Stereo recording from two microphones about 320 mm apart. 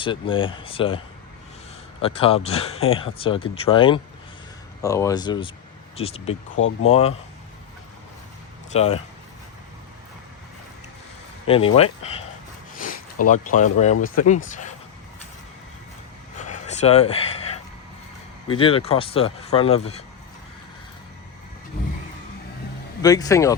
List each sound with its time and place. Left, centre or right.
0.0 s speech: centre
6.6 s speech: left
8.7 s speech: centre
11.4 s speech: centre
13.2 s speech: left
16.4 s a sound: left
18.4 s speech: centre
23.0 s speech: centre